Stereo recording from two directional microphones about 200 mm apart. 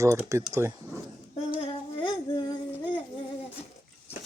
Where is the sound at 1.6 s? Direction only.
25° left (ahead or behind).